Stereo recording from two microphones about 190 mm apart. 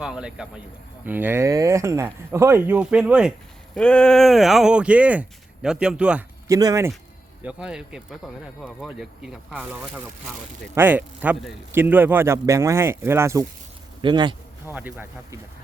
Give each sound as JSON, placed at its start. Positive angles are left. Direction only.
{"t": 0.0, "sound": "a man's voice", "side_deg": -5}
{"t": 3.8, "sound": "speech", "side_deg": 5}
{"t": 6.5, "sound": "a man's voice", "side_deg": -20}
{"t": 7.4, "sound": "a man's voice", "side_deg": -5}
{"t": 14.7, "sound": "a man's voice", "side_deg": -10}